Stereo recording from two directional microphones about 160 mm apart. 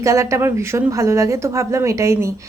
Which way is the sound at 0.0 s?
20° right (ahead or behind).